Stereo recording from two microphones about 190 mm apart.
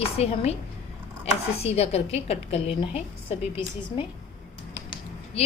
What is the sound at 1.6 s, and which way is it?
Speech, 35° left (ahead or behind).